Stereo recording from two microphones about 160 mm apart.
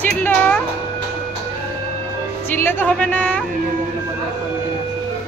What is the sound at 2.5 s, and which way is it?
Speech, 15° left (ahead or behind).